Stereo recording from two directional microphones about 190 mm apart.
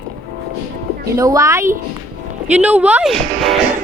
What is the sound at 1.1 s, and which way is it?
Speech, 15° right (ahead or behind).